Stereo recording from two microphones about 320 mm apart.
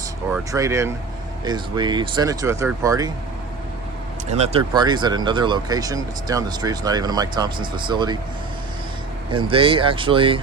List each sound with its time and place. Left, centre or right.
0.3 s speech: centre
4.3 s speech: centre
9.3 s speech: centre